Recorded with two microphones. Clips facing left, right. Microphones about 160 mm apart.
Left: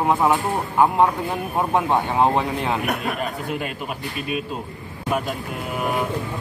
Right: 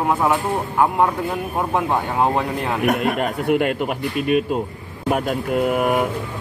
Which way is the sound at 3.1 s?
65° right (ahead or behind).